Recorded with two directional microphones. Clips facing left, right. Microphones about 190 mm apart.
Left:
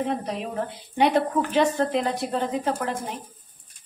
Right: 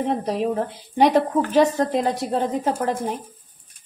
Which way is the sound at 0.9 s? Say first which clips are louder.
Right 4 dB; 40° right (ahead or behind).